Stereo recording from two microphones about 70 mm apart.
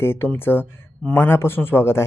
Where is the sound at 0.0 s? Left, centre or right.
Left.